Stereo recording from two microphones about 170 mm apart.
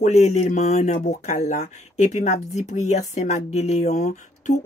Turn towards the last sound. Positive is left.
turn(degrees=45)  # may be behind; listen again after turning